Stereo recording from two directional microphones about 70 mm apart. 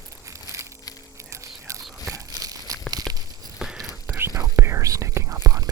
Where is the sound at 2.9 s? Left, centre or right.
Right.